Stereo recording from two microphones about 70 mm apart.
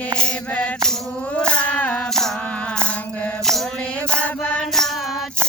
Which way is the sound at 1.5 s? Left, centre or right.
Centre.